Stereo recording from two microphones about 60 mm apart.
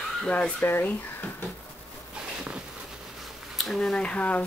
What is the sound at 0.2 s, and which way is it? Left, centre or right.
Speech, centre.